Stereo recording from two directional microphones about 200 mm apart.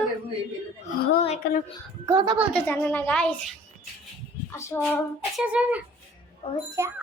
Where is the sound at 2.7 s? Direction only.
10° left (ahead or behind).